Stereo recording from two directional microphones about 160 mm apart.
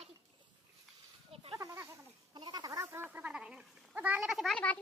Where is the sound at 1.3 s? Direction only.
35° right (ahead or behind).